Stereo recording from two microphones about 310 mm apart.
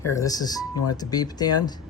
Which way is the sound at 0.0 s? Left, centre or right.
Centre.